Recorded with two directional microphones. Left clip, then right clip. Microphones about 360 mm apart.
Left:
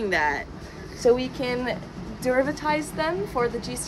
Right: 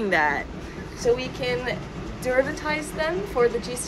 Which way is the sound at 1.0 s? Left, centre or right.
Left.